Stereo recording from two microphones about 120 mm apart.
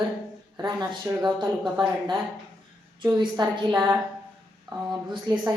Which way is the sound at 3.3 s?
30° right (ahead or behind).